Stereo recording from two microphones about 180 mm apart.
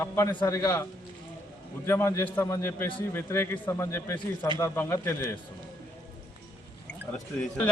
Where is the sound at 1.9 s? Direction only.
15° left (ahead or behind).